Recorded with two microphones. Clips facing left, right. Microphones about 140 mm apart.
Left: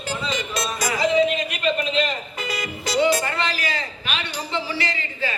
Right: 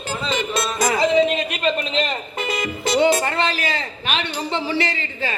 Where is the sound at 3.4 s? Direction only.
25° right (ahead or behind).